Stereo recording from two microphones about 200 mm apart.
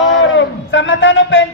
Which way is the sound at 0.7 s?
70° left (ahead or behind).